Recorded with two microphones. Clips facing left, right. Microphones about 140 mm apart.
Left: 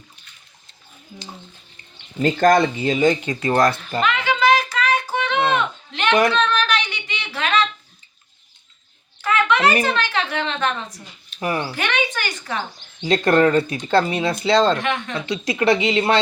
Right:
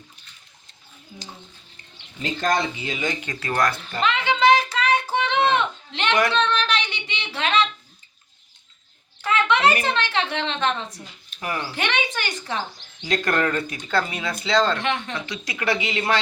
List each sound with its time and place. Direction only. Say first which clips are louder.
2.2 s speech: left 8 dB; 50° left (ahead or behind)
3.2 s speech: left 6 dB; 25° left (ahead or behind)
4.0 s a sound: even; 25° right (ahead or behind)
6.3 s child singing: left 2 dB; 25° right (ahead or behind)
7.3 s a sound: left 1 dB; 25° right (ahead or behind)
9.2 s a sound: left 2 dB; 25° right (ahead or behind)
9.8 s a woman's voice: left 2 dB; 25° right (ahead or behind)
11.3 s speech: left 5 dB; 25° left (ahead or behind)
11.7 s speech: left 2 dB; 25° right (ahead or behind)
13.0 s speech: left 7 dB; 30° left (ahead or behind)
14.8 s a woman's voice: left 2 dB; 30° right (ahead or behind)
15.1 s speech: left 7 dB; 30° left (ahead or behind)